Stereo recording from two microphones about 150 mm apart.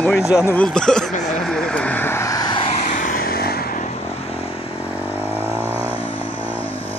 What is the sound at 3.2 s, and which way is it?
Vehicle, 90° left.